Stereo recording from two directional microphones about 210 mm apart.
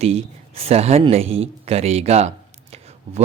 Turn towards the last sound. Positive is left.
turn(degrees=-30)  # may be behind; listen again after turning